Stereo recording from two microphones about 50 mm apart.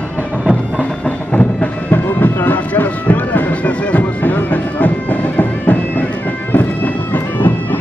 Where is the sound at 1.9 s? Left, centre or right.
Left.